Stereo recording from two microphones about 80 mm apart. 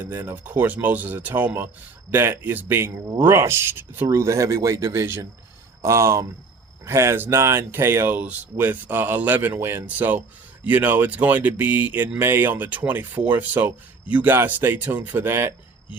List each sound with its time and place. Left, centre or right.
0.0 s speech: right